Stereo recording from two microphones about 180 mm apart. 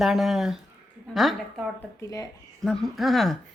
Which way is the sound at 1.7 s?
15° left (ahead or behind).